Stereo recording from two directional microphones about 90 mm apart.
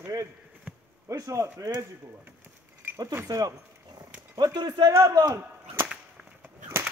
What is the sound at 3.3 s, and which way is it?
Speech, 40° right (ahead or behind).